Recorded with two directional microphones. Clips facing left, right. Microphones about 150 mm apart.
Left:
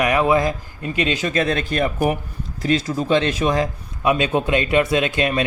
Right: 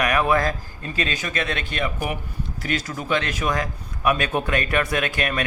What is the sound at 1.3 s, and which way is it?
A man's voice, 35° left (ahead or behind).